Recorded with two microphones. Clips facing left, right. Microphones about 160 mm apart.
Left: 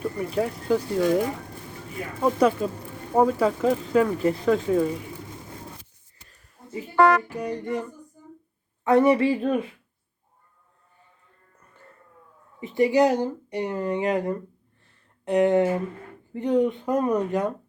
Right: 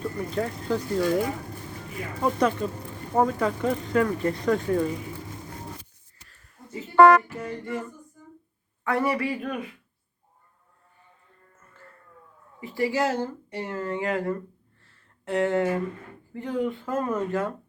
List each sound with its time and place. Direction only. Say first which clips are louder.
0.3 s speech: left 4 dB; 10° left (ahead or behind)
2.2 s speech: left 3 dB; 5° left (ahead or behind)
6.2 s a sound: left 1 dB; 15° left (ahead or behind)
6.9 s speech: right 3 dB; 50° right (ahead or behind)
7.3 s speech: left 4 dB; 15° left (ahead or behind)
12.5 s speech: left 6 dB; 20° left (ahead or behind)